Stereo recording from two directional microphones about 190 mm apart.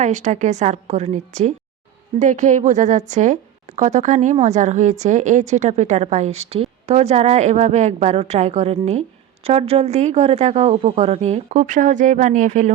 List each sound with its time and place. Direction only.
0.0 s a woman's voice: 40° right (ahead or behind)